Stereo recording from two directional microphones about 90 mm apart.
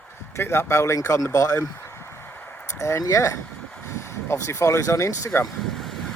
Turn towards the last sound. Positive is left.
turn(degrees=30)  # may be behind; listen again after turning